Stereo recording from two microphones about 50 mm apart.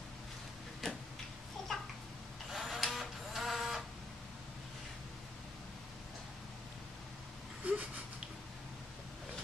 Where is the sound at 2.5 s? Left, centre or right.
Centre.